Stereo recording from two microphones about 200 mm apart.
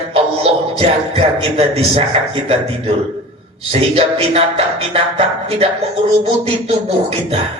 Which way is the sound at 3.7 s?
30° right (ahead or behind).